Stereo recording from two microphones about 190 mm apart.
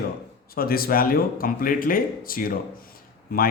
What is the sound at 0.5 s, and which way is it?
Speech, 50° left (ahead or behind).